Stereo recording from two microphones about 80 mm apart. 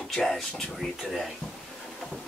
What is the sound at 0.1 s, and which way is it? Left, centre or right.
Speech, centre.